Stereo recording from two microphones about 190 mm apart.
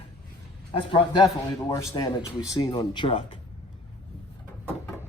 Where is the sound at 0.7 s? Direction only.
25° left (ahead or behind).